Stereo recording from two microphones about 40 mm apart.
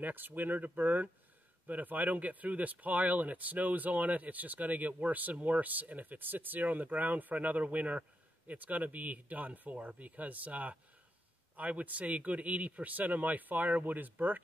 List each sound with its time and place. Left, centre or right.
0.0 s a man's voice: right